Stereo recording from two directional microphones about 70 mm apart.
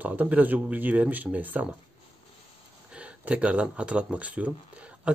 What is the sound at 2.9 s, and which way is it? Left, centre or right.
Speech, centre.